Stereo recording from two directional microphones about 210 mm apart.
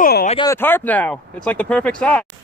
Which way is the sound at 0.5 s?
10° left (ahead or behind).